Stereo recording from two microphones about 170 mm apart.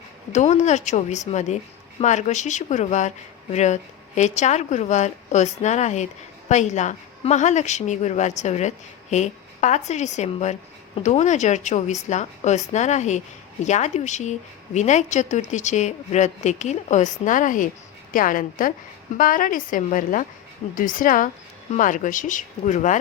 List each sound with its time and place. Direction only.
0.3 s a woman's voice: 45° left (ahead or behind)